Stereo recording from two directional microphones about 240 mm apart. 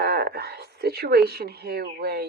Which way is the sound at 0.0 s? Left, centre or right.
Right.